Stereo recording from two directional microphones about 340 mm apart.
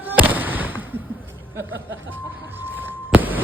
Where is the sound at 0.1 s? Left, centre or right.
Centre.